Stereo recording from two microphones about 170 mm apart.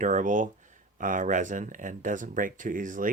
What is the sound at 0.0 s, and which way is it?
Speech, 50° right (ahead or behind).